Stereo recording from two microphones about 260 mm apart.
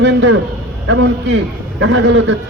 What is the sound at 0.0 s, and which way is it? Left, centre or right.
A man's voice, right.